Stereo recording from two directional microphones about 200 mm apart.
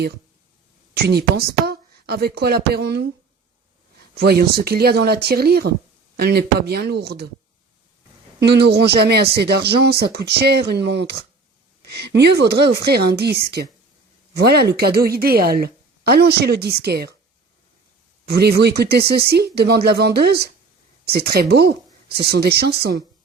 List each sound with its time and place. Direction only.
0.9 s a woman's voice: 50° right (ahead or behind)
8.4 s a woman's voice: 55° right (ahead or behind)
18.3 s a woman's voice: 55° right (ahead or behind)